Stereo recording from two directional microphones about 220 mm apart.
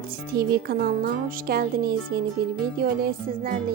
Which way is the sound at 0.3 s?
45° right (ahead or behind).